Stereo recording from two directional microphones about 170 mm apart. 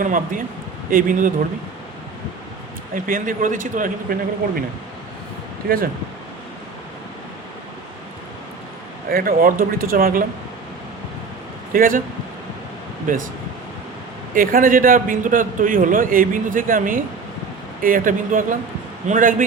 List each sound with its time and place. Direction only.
0.0 s a man's voice: 50° right (ahead or behind)
2.9 s a man's voice: 55° right (ahead or behind)
5.6 s speech: 60° right (ahead or behind)
9.0 s speech: 60° right (ahead or behind)
11.7 s speech: 55° right (ahead or behind)
13.1 s a man's voice: 55° right (ahead or behind)
14.3 s a man's voice: 55° right (ahead or behind)